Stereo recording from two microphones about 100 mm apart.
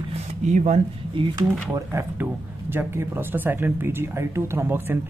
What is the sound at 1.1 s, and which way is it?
Speech, 55° right (ahead or behind).